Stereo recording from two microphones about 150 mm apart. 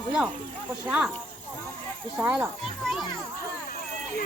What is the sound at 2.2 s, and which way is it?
Speech, 10° right (ahead or behind).